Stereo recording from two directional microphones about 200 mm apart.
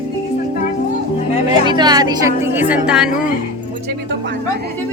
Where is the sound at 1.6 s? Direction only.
20° right (ahead or behind).